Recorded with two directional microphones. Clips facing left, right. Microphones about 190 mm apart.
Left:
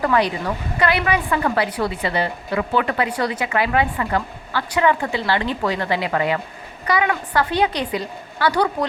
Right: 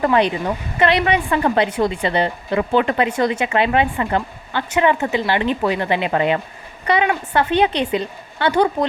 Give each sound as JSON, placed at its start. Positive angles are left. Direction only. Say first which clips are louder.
{"t": 0.0, "sound": "a woman's voice", "louder": "right 2 dB", "side_deg": -25}